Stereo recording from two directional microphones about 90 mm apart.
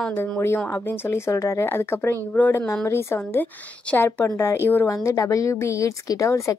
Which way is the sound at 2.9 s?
30° left (ahead or behind).